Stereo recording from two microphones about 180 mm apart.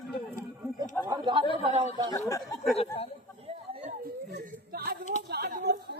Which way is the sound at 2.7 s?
35° left (ahead or behind).